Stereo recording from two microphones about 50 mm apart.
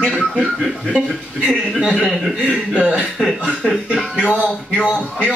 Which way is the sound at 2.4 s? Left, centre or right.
Left.